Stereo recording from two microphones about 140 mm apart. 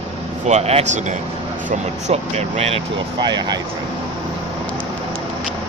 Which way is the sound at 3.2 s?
30° right (ahead or behind).